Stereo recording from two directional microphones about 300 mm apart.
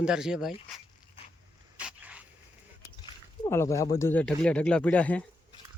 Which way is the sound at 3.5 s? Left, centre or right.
Centre.